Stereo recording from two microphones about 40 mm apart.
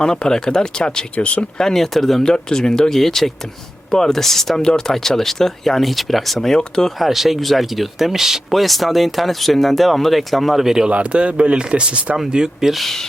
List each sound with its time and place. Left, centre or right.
0.0 s speech: centre
1.1 s speech: left
1.5 s speech: centre
6.8 s speech: centre
10.8 s speech: right
12.1 s speech: centre
12.6 s speech: centre